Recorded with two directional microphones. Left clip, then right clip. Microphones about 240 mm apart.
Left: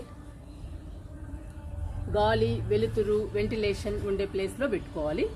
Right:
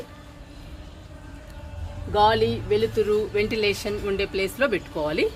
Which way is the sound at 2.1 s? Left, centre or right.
Right.